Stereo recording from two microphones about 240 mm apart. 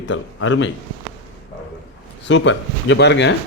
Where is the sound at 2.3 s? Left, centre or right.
Left.